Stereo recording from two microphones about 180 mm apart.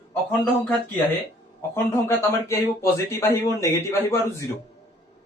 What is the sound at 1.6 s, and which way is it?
A man's voice, 15° left (ahead or behind).